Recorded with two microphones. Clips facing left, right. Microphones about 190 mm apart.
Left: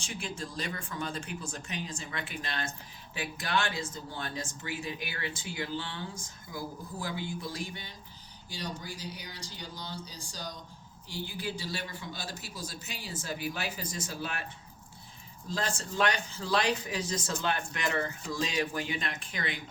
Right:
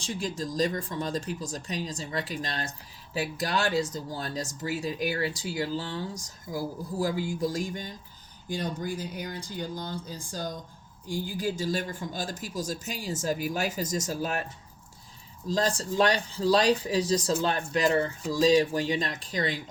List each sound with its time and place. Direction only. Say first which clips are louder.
0.0 s a man's voice: right 6 dB; 35° right (ahead or behind)
15.4 s speech: right 7 dB; 35° right (ahead or behind)